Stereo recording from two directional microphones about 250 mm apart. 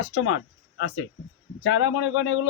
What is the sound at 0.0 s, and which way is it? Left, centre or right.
Speech, left.